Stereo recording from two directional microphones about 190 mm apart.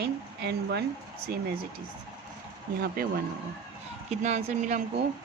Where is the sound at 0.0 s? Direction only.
60° right (ahead or behind).